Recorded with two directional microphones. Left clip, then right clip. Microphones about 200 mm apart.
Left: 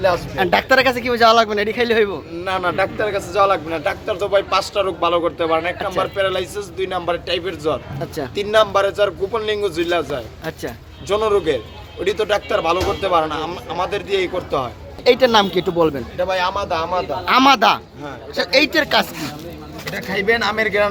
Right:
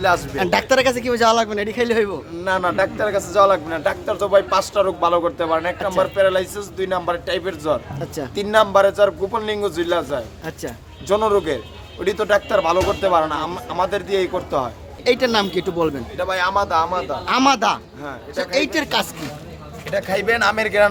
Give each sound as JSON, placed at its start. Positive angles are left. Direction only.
{"t": 0.3, "sound": "a man's voice", "side_deg": -15}
{"t": 15.0, "sound": "speech", "side_deg": 0}
{"t": 16.1, "sound": "speech", "side_deg": -30}
{"t": 17.2, "sound": "speech", "side_deg": 0}
{"t": 18.7, "sound": "speech", "side_deg": -5}
{"t": 19.9, "sound": "a man's voice", "side_deg": -60}